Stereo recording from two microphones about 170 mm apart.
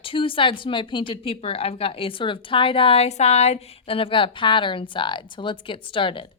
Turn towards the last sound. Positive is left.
turn(degrees=30)  # may be behind; listen again after turning